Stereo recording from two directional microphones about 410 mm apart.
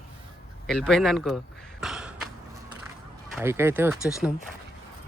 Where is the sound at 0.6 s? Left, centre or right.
Centre.